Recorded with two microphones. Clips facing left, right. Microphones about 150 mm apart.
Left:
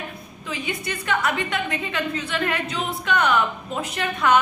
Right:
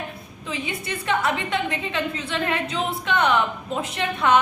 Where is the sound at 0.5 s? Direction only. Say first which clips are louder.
Even; 25° right (ahead or behind).